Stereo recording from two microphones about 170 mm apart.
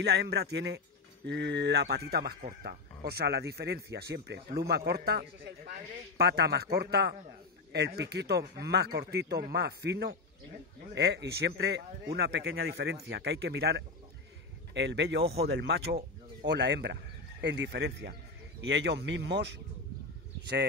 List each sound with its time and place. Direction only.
0.0 s speech: 75° right (ahead or behind)
14.7 s speech: 90° right
15.3 s speech: 75° right (ahead or behind)
16.4 s speech: 90° right; by 18.1 s 75° right (ahead or behind)
18.7 s speech: 90° right